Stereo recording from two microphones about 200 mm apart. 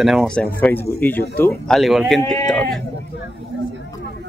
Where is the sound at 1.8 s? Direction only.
Centre (ahead or behind).